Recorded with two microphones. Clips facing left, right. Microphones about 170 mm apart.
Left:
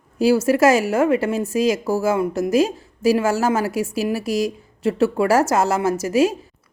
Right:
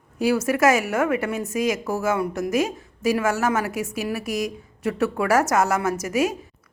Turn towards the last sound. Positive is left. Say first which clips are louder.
# left 5 dB
turn(degrees=30)  # may be behind; listen again after turning